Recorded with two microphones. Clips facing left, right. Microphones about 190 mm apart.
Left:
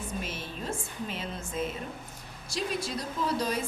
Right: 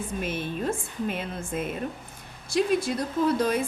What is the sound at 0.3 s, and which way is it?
A woman's voice, 55° right (ahead or behind).